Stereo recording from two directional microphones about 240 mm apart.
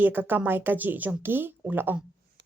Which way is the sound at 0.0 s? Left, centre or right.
Centre.